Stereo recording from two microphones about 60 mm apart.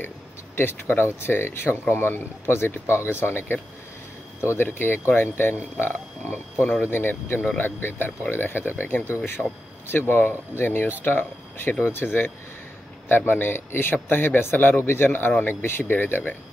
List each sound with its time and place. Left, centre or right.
0.6 s speech: left